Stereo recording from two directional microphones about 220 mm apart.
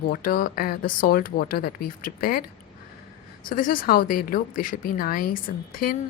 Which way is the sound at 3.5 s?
40° left (ahead or behind).